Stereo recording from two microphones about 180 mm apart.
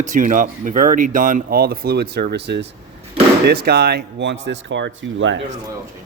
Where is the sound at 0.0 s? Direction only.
45° right (ahead or behind); by 5.4 s 90° right.